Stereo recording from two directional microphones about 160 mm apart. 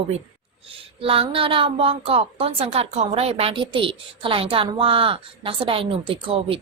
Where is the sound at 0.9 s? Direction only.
35° right (ahead or behind).